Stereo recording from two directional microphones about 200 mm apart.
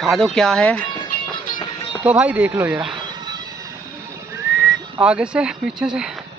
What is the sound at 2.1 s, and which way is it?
Speech, 5° right (ahead or behind).